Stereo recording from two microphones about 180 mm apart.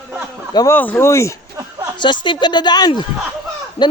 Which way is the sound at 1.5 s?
15° right (ahead or behind).